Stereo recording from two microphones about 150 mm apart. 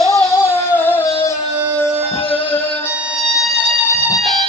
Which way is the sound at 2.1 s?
40° left (ahead or behind).